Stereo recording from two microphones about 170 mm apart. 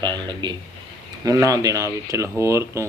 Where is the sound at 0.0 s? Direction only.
25° right (ahead or behind).